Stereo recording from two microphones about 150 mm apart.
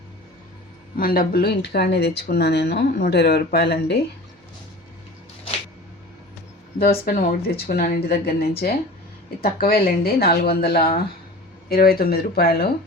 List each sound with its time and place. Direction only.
0.9 s speech: 75° left (ahead or behind); by 4.0 s 90° left
6.7 s speech: 90° left